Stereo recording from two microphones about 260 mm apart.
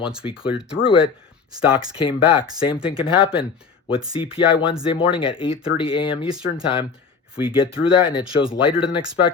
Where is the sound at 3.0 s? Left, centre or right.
Centre.